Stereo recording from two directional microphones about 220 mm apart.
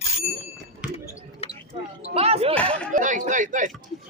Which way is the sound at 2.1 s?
30° right (ahead or behind).